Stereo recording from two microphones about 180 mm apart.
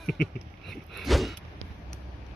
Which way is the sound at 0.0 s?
Centre (ahead or behind).